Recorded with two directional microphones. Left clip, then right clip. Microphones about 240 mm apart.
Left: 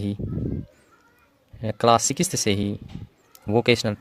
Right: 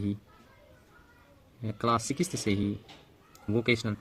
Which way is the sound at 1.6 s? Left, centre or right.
Left.